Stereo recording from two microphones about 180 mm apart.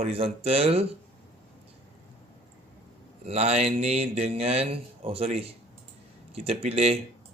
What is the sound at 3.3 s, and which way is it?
Speech, 35° right (ahead or behind).